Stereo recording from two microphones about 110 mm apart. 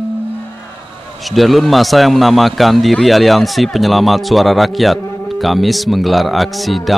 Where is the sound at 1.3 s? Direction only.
Centre (ahead or behind).